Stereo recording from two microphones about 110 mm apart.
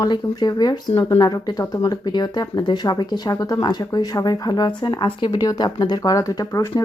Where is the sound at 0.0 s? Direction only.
40° left (ahead or behind).